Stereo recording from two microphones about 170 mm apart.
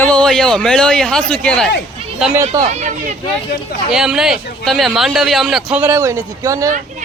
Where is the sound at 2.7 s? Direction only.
45° right (ahead or behind).